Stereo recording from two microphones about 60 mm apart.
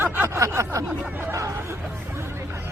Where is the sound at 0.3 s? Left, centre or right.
Right.